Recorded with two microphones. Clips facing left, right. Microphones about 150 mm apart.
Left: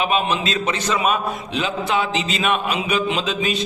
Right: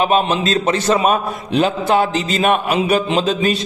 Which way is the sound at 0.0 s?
40° right (ahead or behind).